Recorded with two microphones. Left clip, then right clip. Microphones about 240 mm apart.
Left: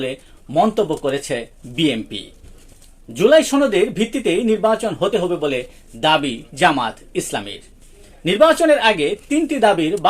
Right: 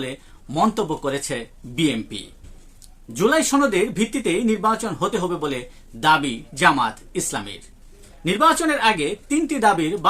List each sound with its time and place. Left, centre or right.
0.5 s speech: centre